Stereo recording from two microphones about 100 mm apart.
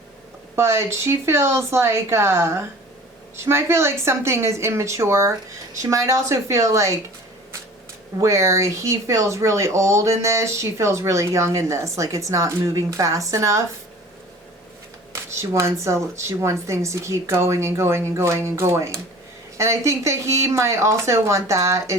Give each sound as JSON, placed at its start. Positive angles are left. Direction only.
{"t": 0.5, "sound": "speech", "side_deg": -25}
{"t": 8.2, "sound": "speech", "side_deg": -30}
{"t": 15.1, "sound": "speech", "side_deg": -30}